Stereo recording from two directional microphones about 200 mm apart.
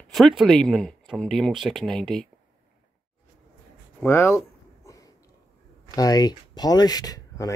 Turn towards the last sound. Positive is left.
turn(degrees=20)  # may be behind; listen again after turning